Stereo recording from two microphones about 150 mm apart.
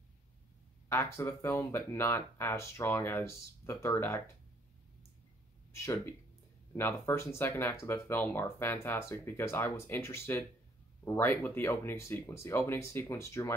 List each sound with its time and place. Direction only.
0.8 s speech: 20° left (ahead or behind)
5.7 s speech: 20° left (ahead or behind)